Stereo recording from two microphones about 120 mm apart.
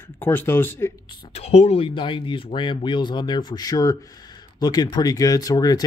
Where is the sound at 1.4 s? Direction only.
60° left (ahead or behind).